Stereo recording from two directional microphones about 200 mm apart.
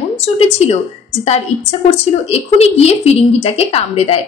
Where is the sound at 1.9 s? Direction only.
30° left (ahead or behind).